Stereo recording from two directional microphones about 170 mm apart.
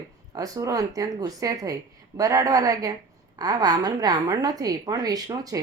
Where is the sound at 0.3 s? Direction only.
20° right (ahead or behind).